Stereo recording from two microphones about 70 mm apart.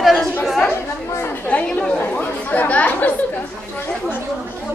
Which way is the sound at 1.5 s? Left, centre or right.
Left.